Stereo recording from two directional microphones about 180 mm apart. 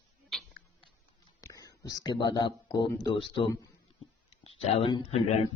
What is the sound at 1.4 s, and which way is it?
Speech, 20° left (ahead or behind).